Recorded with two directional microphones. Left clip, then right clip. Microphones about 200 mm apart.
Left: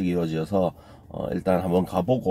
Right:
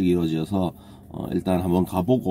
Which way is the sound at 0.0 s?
10° right (ahead or behind).